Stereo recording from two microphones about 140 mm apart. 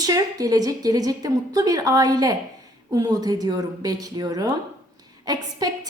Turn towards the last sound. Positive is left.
turn(degrees=-30)  # may be behind; listen again after turning